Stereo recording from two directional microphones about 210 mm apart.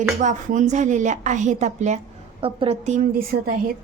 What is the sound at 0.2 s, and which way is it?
A woman's voice, 35° right (ahead or behind).